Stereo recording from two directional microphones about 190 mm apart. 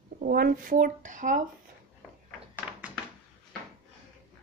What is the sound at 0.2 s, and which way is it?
Speech, 50° right (ahead or behind).